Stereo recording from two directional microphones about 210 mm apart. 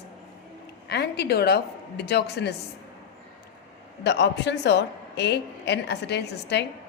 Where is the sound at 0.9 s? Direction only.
50° left (ahead or behind).